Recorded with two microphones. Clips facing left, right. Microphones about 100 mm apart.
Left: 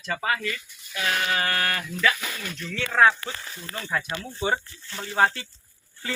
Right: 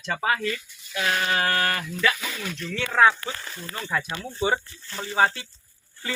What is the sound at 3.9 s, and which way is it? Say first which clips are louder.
Speech: even; 5° right (ahead or behind).